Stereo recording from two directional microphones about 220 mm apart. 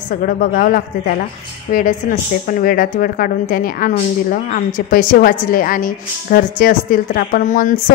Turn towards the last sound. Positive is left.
turn(degrees=35)  # may be behind; listen again after turning